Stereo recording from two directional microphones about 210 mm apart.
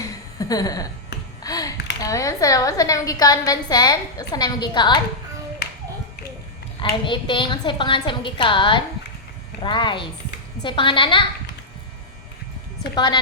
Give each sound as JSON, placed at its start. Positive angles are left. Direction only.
{"t": 0.3, "sound": "a woman's voice", "side_deg": 15}
{"t": 5.6, "sound": "clapping", "side_deg": 50}
{"t": 6.9, "sound": "a woman's voice", "side_deg": 25}
{"t": 12.9, "sound": "a woman's voice", "side_deg": 20}